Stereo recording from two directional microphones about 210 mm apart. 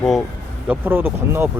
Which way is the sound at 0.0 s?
Centre (ahead or behind).